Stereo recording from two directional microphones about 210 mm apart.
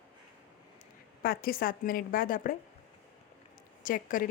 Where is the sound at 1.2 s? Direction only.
45° left (ahead or behind).